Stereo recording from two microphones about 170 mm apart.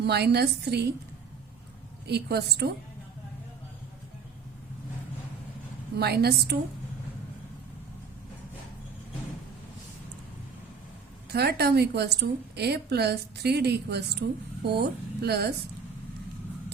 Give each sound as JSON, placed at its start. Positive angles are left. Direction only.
{"t": 0.0, "sound": "a woman's voice", "side_deg": -75}
{"t": 2.0, "sound": "a woman's voice", "side_deg": -70}
{"t": 6.0, "sound": "a woman's voice", "side_deg": -70}
{"t": 11.3, "sound": "a woman's voice", "side_deg": -70}